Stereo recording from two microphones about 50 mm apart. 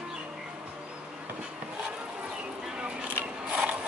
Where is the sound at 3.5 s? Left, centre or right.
Right.